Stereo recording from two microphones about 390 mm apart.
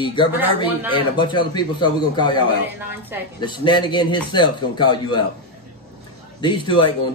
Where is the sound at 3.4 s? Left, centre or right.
Centre.